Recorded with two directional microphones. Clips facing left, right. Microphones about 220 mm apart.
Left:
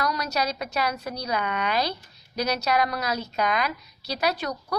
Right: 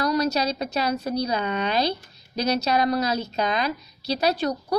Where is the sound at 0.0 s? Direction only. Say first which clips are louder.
Right 5 dB; 30° right (ahead or behind).